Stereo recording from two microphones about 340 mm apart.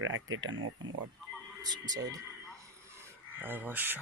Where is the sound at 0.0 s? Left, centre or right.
Right.